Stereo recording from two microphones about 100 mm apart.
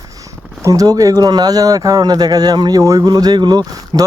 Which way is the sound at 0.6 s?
35° right (ahead or behind).